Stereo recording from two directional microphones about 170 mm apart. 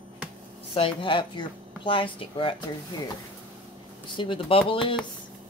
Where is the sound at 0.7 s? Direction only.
30° left (ahead or behind).